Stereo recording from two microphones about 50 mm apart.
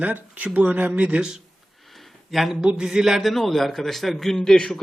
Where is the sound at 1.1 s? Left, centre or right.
Centre.